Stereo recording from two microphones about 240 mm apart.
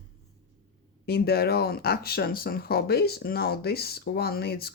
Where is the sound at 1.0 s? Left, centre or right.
Left.